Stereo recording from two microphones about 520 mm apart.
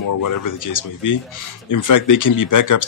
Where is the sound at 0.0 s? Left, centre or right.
Left.